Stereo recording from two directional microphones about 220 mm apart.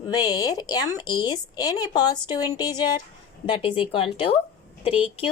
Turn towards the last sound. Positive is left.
turn(degrees=25)  # may be behind; listen again after turning